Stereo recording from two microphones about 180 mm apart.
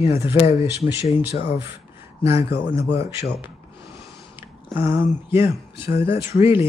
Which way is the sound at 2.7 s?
15° right (ahead or behind).